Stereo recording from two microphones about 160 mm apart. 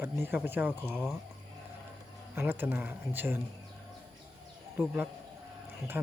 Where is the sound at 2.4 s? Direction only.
15° right (ahead or behind).